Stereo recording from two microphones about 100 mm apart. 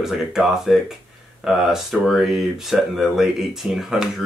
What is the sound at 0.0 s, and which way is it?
Speech, 5° right (ahead or behind).